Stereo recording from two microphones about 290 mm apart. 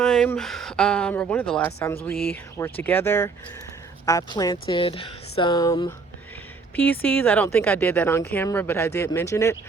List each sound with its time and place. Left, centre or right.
0.0 s a woman's voice: centre